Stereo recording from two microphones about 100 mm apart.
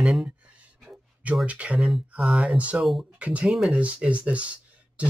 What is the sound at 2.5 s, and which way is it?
Speech, 15° right (ahead or behind).